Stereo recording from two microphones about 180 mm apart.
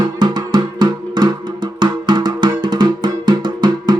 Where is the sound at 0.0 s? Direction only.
25° right (ahead or behind).